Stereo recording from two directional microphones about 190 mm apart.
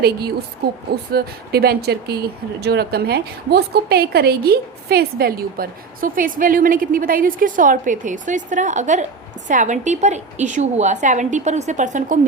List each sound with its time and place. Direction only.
0.0 s owl: 55° right (ahead or behind)
1.1 s a woman's voice: 55° right (ahead or behind)